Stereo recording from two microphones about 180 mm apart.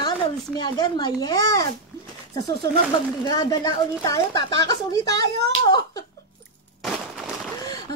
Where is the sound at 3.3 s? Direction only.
20° left (ahead or behind).